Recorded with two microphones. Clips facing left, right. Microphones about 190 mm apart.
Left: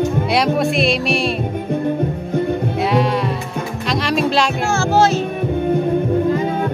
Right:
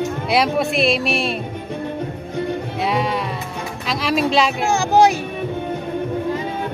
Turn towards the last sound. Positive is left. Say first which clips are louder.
# even
turn(degrees=-15)  # may be behind; listen again after turning